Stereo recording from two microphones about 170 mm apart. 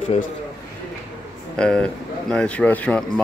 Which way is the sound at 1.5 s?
5° left (ahead or behind).